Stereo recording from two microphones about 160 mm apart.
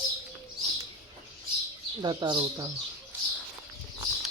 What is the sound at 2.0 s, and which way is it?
Speech, 25° right (ahead or behind).